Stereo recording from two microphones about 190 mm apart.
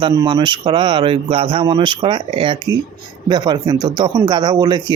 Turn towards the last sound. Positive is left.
turn(degrees=-20)  # may be behind; listen again after turning